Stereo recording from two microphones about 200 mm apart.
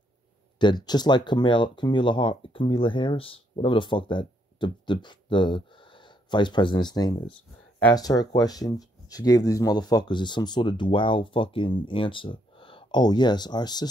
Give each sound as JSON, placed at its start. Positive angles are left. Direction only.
{"t": 0.6, "sound": "speech", "side_deg": 20}